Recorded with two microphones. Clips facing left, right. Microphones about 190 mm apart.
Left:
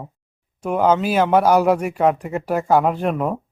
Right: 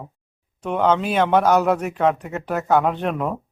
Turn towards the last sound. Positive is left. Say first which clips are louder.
# left 2 dB
turn(degrees=5)  # may be behind; listen again after turning